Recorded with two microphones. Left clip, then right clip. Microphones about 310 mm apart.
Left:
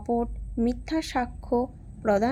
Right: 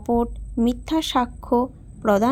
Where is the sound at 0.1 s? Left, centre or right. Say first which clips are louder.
Right 5 dB; right.